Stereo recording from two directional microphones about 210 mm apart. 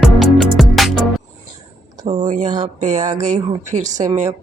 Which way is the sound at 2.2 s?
35° right (ahead or behind).